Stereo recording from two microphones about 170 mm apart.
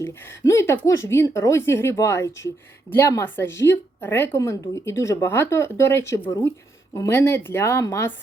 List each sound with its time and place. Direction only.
0.0 s speech: 15° left (ahead or behind)